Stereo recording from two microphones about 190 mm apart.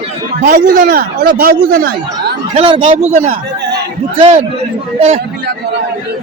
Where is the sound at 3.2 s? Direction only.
55° right (ahead or behind).